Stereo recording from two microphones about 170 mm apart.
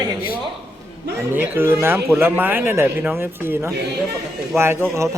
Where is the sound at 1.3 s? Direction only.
15° right (ahead or behind).